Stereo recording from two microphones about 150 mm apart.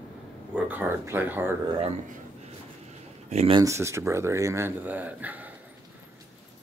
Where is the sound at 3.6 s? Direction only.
20° right (ahead or behind).